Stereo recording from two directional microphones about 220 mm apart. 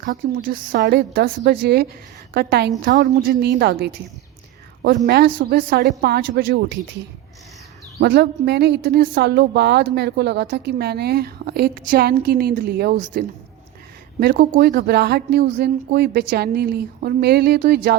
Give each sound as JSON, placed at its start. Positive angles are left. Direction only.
{"t": 0.0, "sound": "a woman's voice", "side_deg": -40}
{"t": 5.0, "sound": "a woman's voice", "side_deg": -45}
{"t": 7.9, "sound": "a woman's voice", "side_deg": -50}